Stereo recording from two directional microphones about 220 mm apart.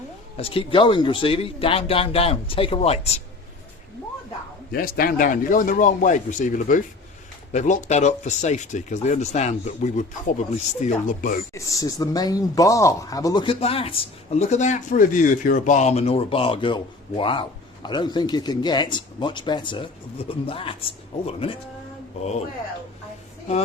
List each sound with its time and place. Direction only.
0.3 s speech: 25° left (ahead or behind)
4.7 s speech: 40° left (ahead or behind)
11.5 s speech: 15° left (ahead or behind)